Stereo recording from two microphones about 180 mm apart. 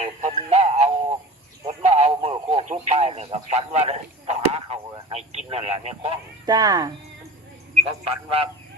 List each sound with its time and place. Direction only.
0.0 s music: 35° right (ahead or behind)
1.6 s radio: 35° right (ahead or behind)
6.4 s speech: 20° right (ahead or behind)
8.0 s a man's voice: 30° right (ahead or behind)